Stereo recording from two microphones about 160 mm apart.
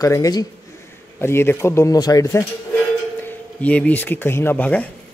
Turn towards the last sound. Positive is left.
turn(degrees=10)  # may be behind; listen again after turning